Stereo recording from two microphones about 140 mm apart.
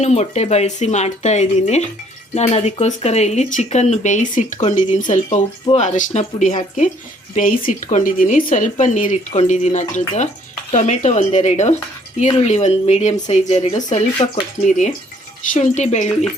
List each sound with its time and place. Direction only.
0.0 s speech: 50° left (ahead or behind)
9.4 s speech: 55° left (ahead or behind)
14.6 s speech: 60° left (ahead or behind)